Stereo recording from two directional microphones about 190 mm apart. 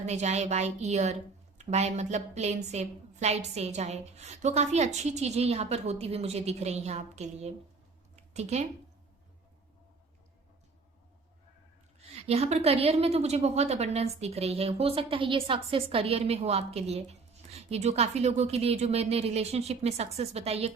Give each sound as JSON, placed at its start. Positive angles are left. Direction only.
{"t": 0.0, "sound": "a woman's voice", "side_deg": -35}
{"t": 8.1, "sound": "a sound", "side_deg": -35}
{"t": 12.1, "sound": "a woman's voice", "side_deg": -35}